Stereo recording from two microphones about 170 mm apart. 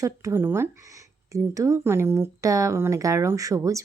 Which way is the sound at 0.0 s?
20° right (ahead or behind).